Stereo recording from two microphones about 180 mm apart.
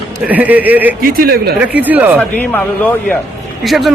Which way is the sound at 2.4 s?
10° left (ahead or behind).